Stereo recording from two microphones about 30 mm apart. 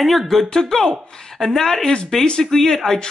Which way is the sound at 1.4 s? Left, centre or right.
Centre.